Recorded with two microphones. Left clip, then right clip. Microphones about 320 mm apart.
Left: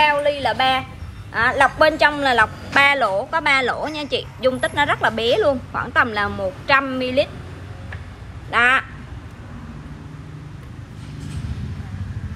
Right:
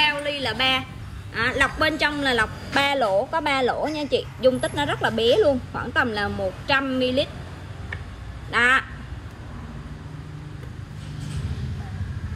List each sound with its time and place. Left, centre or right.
0.0 s a sound: centre
1.3 s a woman's voice: centre
8.5 s a woman's voice: centre